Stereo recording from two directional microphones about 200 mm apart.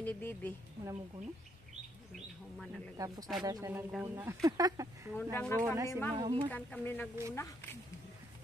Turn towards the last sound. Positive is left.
turn(degrees=10)  # may be behind; listen again after turning